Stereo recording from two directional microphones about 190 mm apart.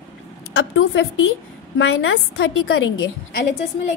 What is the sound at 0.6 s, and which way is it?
A woman's voice, 90° left.